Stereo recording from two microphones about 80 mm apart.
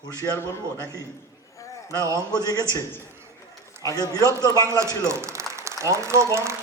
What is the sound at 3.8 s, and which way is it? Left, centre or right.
Speech, left.